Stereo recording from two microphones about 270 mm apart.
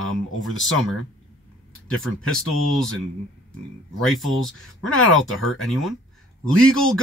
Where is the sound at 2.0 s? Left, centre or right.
Centre.